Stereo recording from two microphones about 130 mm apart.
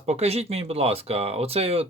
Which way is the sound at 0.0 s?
55° right (ahead or behind).